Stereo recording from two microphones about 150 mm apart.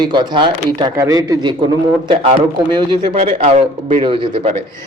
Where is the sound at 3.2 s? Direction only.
40° right (ahead or behind).